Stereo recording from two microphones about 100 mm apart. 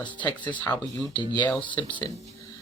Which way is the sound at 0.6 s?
45° left (ahead or behind).